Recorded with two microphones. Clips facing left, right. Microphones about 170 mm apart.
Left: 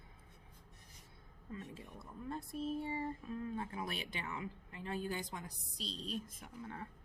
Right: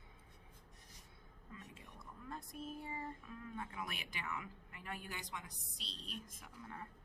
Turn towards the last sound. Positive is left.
turn(degrees=25)  # may be behind; listen again after turning